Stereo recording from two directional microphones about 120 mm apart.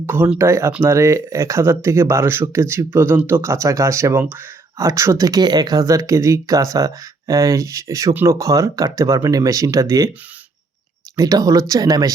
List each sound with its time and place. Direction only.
0.0 s speech: 20° right (ahead or behind)
11.2 s speech: 30° right (ahead or behind)